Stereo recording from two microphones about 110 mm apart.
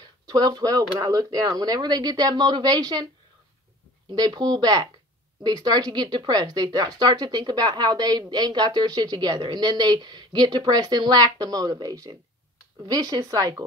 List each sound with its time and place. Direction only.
0.3 s speech: 35° right (ahead or behind)
4.1 s speech: 35° right (ahead or behind)